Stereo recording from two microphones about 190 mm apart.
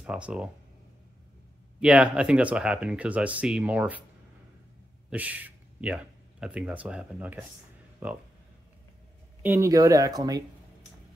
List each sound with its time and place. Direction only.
0.0 s speech: 5° right (ahead or behind)
1.8 s speech: 5° right (ahead or behind)
5.1 s speech: 10° right (ahead or behind)
9.4 s speech: 15° right (ahead or behind)